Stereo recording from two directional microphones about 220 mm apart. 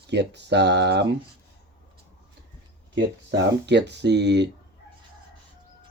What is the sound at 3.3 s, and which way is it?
Speech, 50° right (ahead or behind).